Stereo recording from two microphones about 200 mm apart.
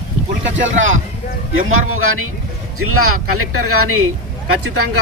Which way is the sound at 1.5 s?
90° right.